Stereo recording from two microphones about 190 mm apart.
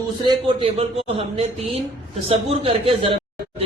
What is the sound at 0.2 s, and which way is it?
Speech, 25° right (ahead or behind).